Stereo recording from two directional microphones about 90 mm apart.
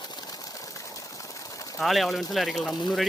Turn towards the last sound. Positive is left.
turn(degrees=0)  # may be behind; listen again after turning